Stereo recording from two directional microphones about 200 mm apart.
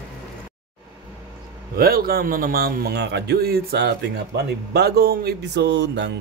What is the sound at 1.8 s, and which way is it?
A man's voice, 50° right (ahead or behind).